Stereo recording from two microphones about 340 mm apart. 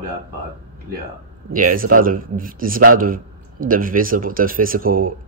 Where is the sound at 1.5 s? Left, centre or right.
Right.